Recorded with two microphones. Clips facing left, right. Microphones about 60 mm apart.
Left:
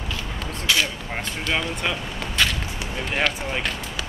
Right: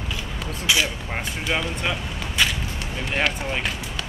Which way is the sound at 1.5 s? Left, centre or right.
Centre.